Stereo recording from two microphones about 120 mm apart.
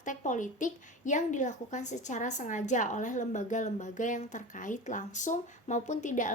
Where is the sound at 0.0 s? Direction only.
90° left.